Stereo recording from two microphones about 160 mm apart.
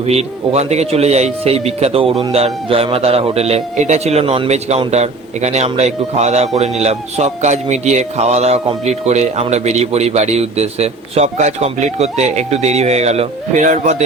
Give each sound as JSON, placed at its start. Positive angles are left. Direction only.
{"t": 0.0, "sound": "a man's voice", "side_deg": -40}